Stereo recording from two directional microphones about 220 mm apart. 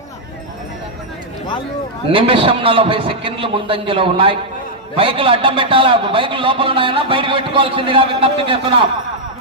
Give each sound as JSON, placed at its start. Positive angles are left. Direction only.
{"t": 2.1, "sound": "a man's voice", "side_deg": -25}